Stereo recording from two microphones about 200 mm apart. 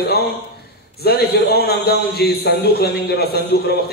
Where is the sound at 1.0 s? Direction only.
55° left (ahead or behind).